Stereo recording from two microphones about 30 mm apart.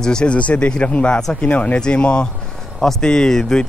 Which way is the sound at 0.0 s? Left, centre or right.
Left.